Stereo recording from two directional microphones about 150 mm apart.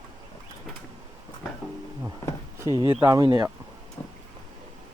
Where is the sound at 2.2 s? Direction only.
20° left (ahead or behind).